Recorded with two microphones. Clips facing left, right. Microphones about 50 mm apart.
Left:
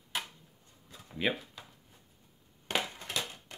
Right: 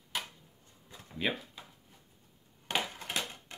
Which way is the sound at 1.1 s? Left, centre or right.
Centre.